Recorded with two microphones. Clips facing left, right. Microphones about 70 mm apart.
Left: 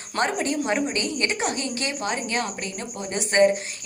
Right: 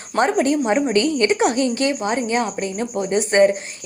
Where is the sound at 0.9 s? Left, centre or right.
Right.